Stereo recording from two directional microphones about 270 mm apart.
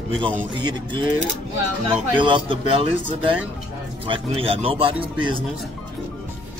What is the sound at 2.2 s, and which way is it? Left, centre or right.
Speech, centre.